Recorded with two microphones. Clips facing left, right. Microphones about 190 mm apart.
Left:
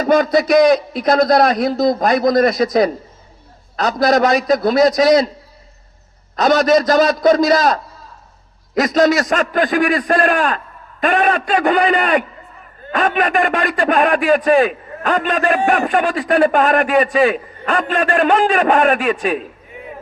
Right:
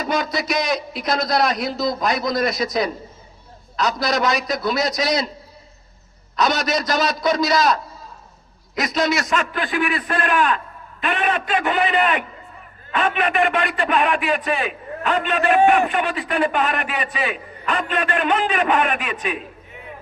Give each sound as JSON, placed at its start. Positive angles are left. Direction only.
{"t": 0.0, "sound": "a man's voice", "side_deg": 50}
{"t": 6.3, "sound": "a man's voice", "side_deg": 50}